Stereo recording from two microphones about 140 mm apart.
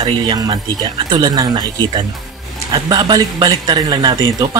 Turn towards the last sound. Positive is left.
turn(degrees=-30)  # may be behind; listen again after turning